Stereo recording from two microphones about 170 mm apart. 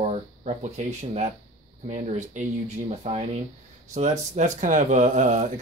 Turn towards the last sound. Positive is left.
turn(degrees=-50)  # may be behind; listen again after turning